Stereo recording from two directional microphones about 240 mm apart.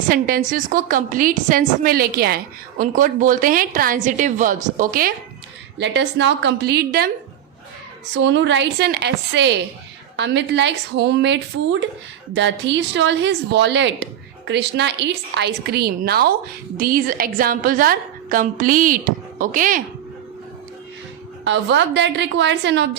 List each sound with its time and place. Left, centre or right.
0.1 s a woman's voice: right
5.8 s a woman's voice: right
8.1 s a woman's voice: right
21.4 s a woman's voice: right